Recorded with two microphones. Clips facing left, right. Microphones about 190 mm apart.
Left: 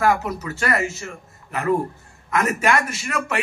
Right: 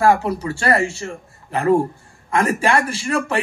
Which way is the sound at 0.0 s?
30° right (ahead or behind).